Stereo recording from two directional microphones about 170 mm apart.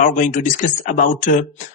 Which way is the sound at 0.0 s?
50° left (ahead or behind).